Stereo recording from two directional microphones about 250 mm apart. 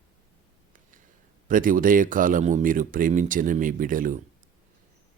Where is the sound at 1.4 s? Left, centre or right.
Right.